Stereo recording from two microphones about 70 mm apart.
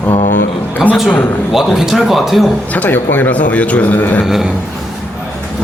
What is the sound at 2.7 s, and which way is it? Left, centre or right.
A man's voice, left.